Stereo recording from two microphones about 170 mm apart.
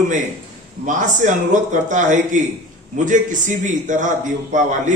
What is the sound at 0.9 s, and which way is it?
A man's voice, 45° right (ahead or behind).